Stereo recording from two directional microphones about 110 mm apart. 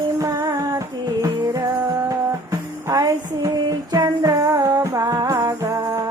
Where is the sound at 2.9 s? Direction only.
30° right (ahead or behind).